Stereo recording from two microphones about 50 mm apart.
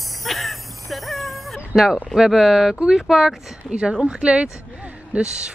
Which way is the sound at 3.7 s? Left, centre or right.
Right.